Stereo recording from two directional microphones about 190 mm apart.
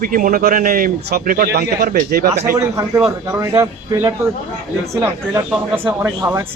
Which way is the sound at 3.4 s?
15° right (ahead or behind).